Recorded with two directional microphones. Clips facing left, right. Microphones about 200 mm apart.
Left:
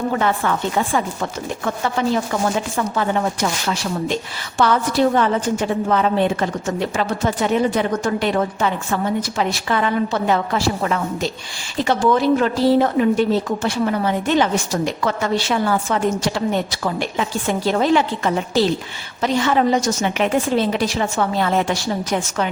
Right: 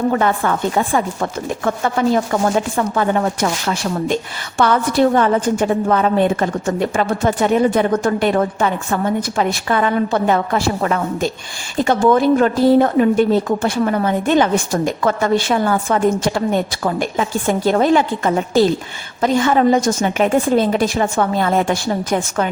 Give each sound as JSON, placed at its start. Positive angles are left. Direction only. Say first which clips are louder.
{"t": 0.2, "sound": "a woman's voice", "louder": "right 2 dB", "side_deg": -45}